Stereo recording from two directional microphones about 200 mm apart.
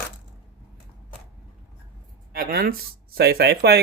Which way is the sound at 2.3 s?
50° right (ahead or behind).